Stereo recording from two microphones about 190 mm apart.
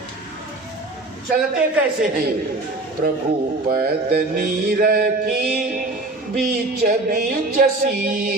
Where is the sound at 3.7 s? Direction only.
50° right (ahead or behind).